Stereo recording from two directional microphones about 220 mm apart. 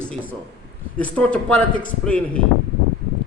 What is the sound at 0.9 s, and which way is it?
A man's voice, 5° left (ahead or behind).